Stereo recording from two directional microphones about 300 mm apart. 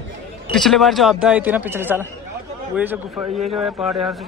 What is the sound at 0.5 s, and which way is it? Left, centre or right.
A man's voice, centre.